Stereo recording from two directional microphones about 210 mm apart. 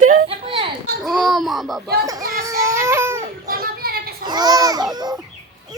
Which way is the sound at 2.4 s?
15° right (ahead or behind).